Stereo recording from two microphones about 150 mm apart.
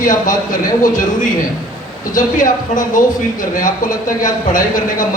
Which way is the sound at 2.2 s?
65° left (ahead or behind).